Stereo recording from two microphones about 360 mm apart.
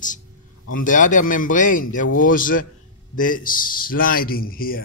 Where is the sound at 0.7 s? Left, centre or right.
Left.